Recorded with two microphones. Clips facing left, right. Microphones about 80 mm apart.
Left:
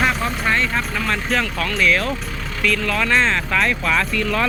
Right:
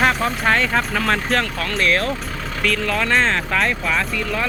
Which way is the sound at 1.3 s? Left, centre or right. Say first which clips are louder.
Even; right.